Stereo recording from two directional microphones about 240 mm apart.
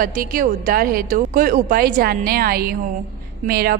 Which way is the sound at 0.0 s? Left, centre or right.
Right.